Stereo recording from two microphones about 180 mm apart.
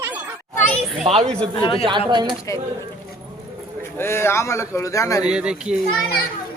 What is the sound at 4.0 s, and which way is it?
A man's voice, 15° left (ahead or behind).